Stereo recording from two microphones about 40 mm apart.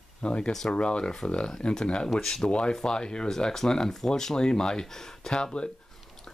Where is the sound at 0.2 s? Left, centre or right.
Left.